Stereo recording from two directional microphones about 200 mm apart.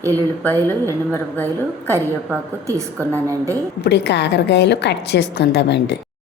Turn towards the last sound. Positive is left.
turn(degrees=60)  # may be behind; listen again after turning